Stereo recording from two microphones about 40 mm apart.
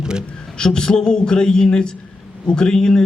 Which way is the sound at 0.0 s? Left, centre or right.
Right.